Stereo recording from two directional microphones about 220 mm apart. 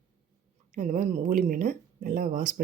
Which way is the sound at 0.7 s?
35° right (ahead or behind).